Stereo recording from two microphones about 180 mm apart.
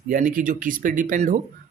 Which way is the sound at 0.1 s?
50° right (ahead or behind).